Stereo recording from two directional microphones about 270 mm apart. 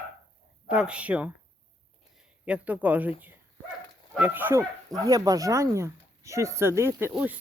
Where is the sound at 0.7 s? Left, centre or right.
Centre.